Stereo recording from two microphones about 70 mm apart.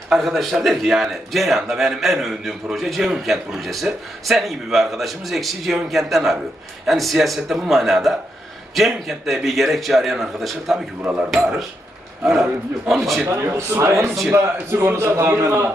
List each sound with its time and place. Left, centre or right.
0.1 s a man's voice: centre
13.4 s a man's voice: right